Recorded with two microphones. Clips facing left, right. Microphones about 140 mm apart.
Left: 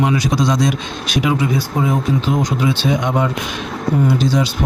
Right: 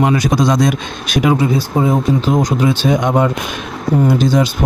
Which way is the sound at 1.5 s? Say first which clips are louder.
Right 3 dB; 30° right (ahead or behind).